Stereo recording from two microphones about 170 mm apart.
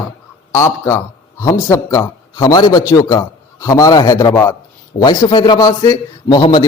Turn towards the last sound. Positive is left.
turn(degrees=25)  # may be behind; listen again after turning